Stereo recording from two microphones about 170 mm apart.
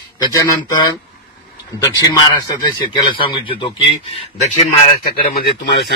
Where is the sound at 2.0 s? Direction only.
25° left (ahead or behind).